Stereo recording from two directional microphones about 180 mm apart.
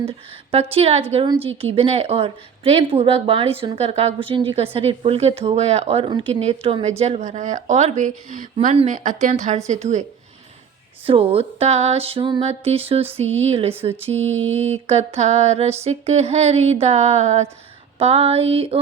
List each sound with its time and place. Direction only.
0.5 s a woman's voice: 35° right (ahead or behind)